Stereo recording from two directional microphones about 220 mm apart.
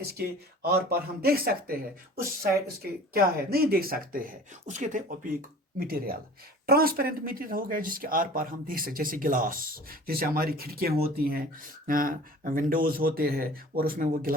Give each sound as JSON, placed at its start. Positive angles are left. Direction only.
{"t": 0.1, "sound": "speech", "side_deg": -45}